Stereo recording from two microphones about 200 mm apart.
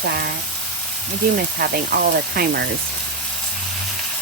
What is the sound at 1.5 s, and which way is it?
Speech, 50° right (ahead or behind).